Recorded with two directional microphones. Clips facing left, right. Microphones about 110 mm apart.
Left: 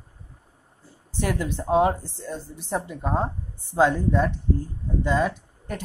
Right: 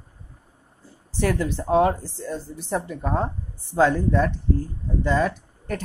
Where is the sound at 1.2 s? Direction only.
10° left (ahead or behind).